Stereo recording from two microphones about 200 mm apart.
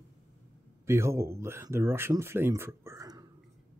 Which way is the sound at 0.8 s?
15° right (ahead or behind).